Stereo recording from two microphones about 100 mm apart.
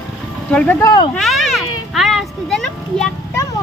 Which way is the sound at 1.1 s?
Centre (ahead or behind).